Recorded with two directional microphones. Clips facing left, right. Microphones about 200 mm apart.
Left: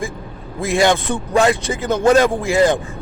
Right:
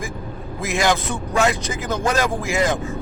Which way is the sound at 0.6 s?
30° left (ahead or behind).